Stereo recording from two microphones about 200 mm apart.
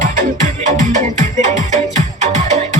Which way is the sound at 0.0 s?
40° right (ahead or behind).